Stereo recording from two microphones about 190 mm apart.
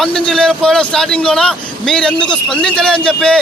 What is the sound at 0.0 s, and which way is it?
A man's voice, 5° left (ahead or behind).